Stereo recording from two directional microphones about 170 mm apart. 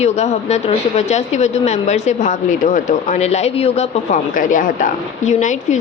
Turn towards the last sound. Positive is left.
turn(degrees=45)  # may be behind; listen again after turning